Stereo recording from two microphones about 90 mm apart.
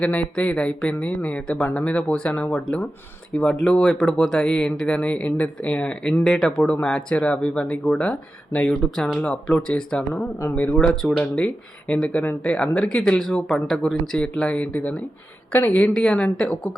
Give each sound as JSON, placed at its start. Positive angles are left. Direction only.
{"t": 0.0, "sound": "speech", "side_deg": 15}
{"t": 6.6, "sound": "a woman's voice", "side_deg": 15}
{"t": 15.9, "sound": "speech", "side_deg": 5}